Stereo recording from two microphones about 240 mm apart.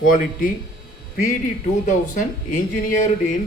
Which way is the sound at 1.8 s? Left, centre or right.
Left.